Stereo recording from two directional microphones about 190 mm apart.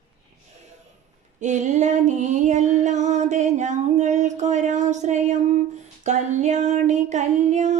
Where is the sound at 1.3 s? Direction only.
40° right (ahead or behind).